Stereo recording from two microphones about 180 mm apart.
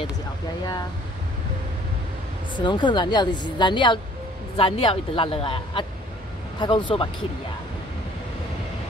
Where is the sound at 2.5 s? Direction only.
25° left (ahead or behind).